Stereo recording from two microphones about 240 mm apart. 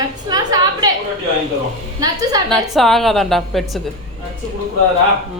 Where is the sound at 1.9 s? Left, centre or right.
Centre.